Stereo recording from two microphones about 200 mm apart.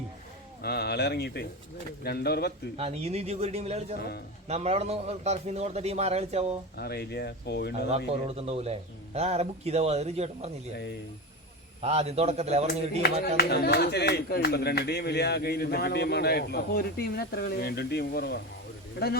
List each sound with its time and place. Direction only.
0.6 s a man's voice: 55° left (ahead or behind)
2.7 s a man's voice: 30° right (ahead or behind)
6.7 s a man's voice: 50° left (ahead or behind)
7.9 s a man's voice: 30° right (ahead or behind)
11.8 s a man's voice: 30° right (ahead or behind)
13.0 s a man's voice: 55° left (ahead or behind)